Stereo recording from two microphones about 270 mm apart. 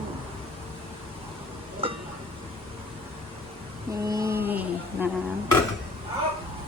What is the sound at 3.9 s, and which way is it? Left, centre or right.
Mantra, centre.